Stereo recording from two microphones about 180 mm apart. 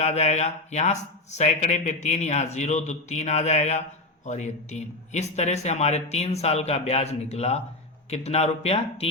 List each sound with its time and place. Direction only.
0.0 s speech: 40° left (ahead or behind)